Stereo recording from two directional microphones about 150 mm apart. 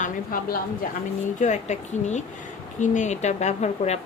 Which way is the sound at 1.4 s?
50° left (ahead or behind).